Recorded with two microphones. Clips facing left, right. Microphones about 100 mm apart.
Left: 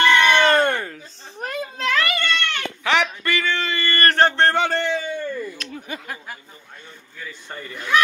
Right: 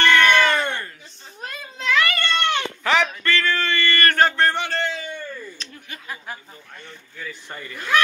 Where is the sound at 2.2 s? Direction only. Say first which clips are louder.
Right 2 dB; 15° right (ahead or behind).